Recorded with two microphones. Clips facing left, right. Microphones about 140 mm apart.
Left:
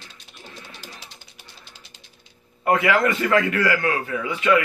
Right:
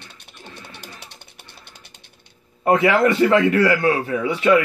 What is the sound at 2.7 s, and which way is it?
A man's voice, 30° right (ahead or behind).